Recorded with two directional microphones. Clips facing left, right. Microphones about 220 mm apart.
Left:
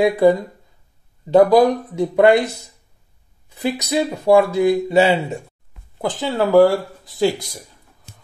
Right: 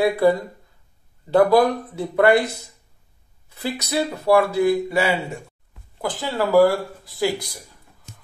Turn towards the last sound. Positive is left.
turn(degrees=20)  # may be behind; listen again after turning